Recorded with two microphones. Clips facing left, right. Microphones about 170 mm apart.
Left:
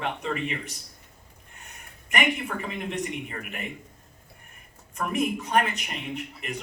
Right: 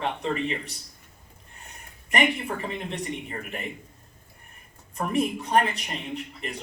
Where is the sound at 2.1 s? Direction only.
35° right (ahead or behind).